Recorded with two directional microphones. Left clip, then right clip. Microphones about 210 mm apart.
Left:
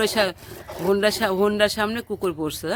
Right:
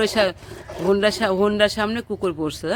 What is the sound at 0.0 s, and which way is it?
Speech, centre (ahead or behind).